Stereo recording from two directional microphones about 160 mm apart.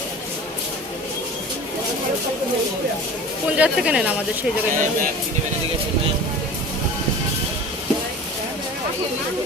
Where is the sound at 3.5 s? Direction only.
10° right (ahead or behind).